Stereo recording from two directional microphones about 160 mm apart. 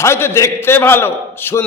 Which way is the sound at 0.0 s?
15° left (ahead or behind).